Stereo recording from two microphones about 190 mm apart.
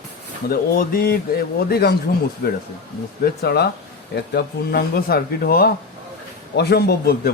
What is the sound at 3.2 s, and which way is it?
A man's voice, 60° left (ahead or behind).